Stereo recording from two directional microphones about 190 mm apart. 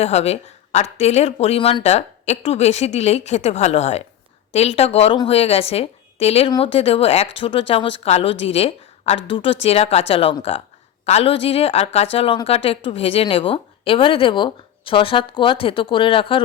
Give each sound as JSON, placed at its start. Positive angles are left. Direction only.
{"t": 0.0, "sound": "a woman's voice", "side_deg": 35}